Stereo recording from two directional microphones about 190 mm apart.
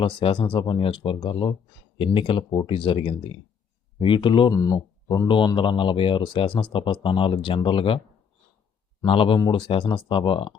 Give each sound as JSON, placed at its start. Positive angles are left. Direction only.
{"t": 0.0, "sound": "speech", "side_deg": 30}